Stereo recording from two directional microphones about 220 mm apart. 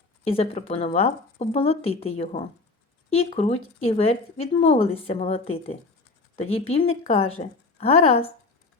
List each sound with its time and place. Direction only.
0.3 s speech: 25° left (ahead or behind)